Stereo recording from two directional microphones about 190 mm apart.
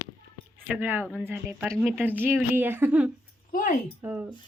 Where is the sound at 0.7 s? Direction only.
10° right (ahead or behind).